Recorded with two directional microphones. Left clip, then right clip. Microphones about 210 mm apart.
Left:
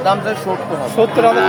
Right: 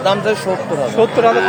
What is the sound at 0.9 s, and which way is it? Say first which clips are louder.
Speech: left 1 dB; 10° left (ahead or behind).